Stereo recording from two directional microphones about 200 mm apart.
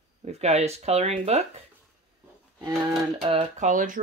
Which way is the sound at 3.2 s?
30° right (ahead or behind).